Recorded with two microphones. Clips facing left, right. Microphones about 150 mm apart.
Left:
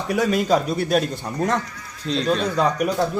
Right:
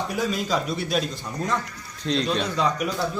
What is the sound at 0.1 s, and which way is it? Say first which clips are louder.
A man's voice: left 10 dB; 65° left (ahead or behind).